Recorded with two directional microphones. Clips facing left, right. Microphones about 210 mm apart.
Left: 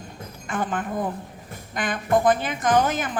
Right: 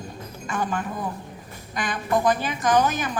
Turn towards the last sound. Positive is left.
turn(degrees=55)  # may be behind; listen again after turning